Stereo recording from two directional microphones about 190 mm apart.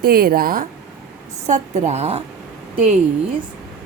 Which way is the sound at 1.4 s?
35° right (ahead or behind).